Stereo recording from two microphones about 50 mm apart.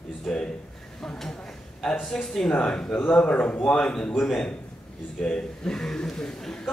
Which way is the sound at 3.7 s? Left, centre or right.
Centre.